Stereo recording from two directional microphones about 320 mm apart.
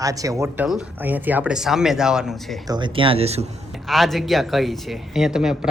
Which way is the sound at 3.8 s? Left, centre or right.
Centre.